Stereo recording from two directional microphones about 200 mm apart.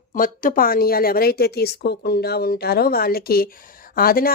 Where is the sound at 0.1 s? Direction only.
45° left (ahead or behind).